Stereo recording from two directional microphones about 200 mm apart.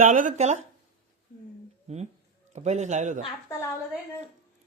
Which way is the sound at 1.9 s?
35° right (ahead or behind).